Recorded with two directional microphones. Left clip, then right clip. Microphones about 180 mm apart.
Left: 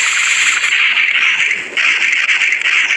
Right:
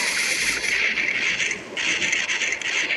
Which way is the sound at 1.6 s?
40° left (ahead or behind).